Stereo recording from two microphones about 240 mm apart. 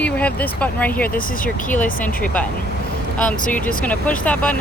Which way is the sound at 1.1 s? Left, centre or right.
Left.